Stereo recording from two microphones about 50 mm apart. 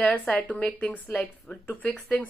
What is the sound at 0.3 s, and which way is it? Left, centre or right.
Speech, left.